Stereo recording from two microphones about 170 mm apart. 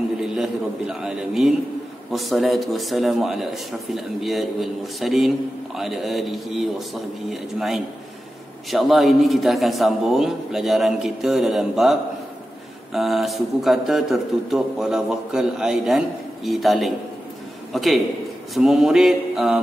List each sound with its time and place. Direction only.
0.2 s a man's voice: 5° right (ahead or behind)